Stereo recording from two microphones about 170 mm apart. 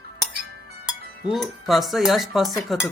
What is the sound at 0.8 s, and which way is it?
Speech, centre (ahead or behind).